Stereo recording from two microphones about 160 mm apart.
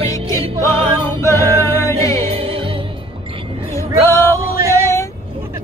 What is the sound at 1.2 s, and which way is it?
A capella, 20° left (ahead or behind).